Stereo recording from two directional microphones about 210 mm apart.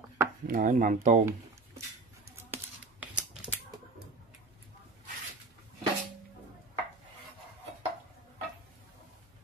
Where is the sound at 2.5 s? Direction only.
5° right (ahead or behind).